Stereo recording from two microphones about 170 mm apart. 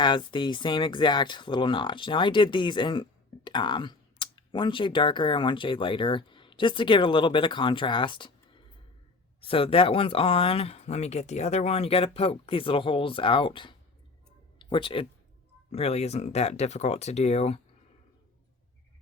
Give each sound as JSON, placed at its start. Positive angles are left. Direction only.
{"t": 0.0, "sound": "speech", "side_deg": 30}